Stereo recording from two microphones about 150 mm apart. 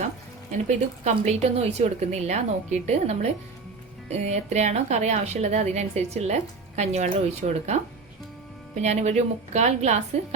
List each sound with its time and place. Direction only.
0.7 s a woman's voice: 50° right (ahead or behind)